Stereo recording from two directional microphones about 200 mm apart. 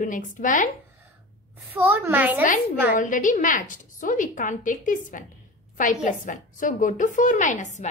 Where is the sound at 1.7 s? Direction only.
10° right (ahead or behind).